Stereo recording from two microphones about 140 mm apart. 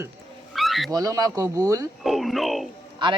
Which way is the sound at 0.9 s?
25° right (ahead or behind).